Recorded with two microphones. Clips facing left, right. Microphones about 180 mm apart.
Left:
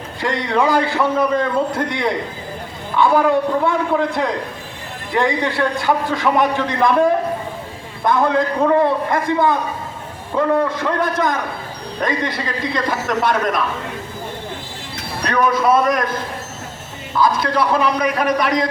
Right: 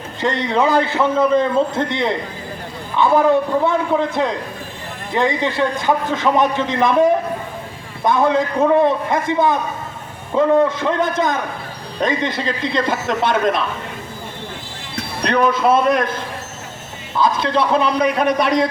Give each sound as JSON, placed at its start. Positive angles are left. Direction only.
{"t": 0.2, "sound": "a man's voice", "side_deg": -20}
{"t": 3.7, "sound": "a man's voice", "side_deg": -20}
{"t": 15.2, "sound": "a man's voice", "side_deg": -25}
{"t": 17.2, "sound": "a man's voice", "side_deg": -25}